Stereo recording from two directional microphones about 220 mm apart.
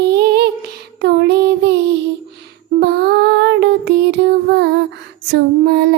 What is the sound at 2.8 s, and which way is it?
Music, 45° right (ahead or behind).